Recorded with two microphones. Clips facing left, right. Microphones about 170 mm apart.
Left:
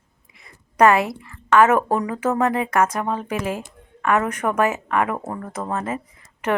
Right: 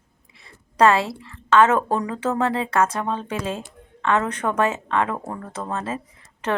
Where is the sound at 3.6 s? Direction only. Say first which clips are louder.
Left 1 dB; 15° left (ahead or behind).